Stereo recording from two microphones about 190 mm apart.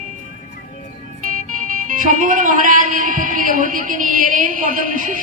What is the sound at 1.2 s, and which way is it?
Music, 45° right (ahead or behind).